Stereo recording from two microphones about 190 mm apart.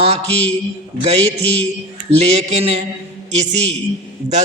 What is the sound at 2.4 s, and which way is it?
Speech, 35° right (ahead or behind).